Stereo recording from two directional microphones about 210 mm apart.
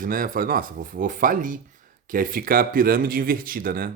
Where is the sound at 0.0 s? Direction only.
40° right (ahead or behind).